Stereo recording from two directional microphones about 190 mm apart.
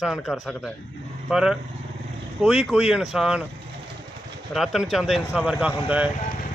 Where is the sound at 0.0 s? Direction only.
Centre (ahead or behind).